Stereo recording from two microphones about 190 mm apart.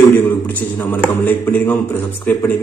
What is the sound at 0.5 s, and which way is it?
A man's voice, 10° left (ahead or behind).